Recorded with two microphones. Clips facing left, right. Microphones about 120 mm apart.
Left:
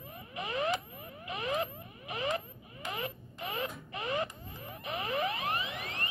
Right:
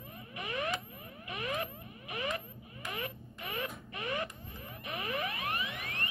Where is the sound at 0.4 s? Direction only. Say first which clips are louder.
Left 4 dB; 25° left (ahead or behind).